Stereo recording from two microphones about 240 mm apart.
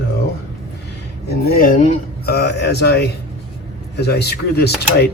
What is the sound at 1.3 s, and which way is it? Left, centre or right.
Speech, left.